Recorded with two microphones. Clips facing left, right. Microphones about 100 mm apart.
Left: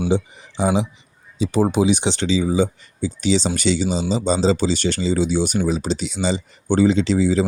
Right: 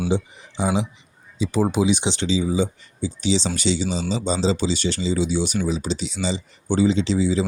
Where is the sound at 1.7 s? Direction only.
50° left (ahead or behind).